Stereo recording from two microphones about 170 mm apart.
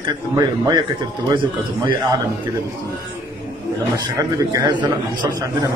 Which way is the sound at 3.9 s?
20° right (ahead or behind).